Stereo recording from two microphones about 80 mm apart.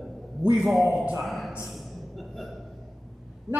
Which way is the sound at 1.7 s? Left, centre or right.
Centre.